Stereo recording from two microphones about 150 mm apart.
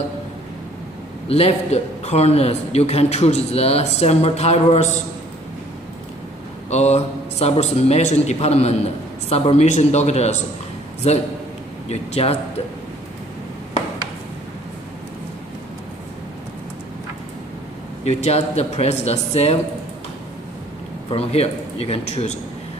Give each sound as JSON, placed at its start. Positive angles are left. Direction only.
{"t": 1.3, "sound": "a man's voice", "side_deg": 45}
{"t": 6.7, "sound": "a man's voice", "side_deg": 45}
{"t": 18.0, "sound": "a man's voice", "side_deg": 45}
{"t": 21.1, "sound": "a man's voice", "side_deg": 45}